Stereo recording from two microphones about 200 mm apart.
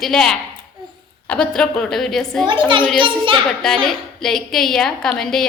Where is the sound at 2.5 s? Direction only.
25° right (ahead or behind).